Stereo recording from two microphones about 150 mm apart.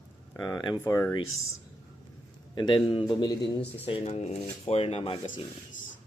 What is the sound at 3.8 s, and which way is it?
Speech, 45° left (ahead or behind).